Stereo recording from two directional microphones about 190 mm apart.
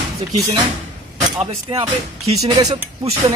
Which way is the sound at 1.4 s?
30° right (ahead or behind).